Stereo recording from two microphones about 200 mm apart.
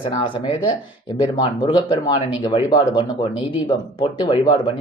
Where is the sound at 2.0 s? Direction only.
25° left (ahead or behind).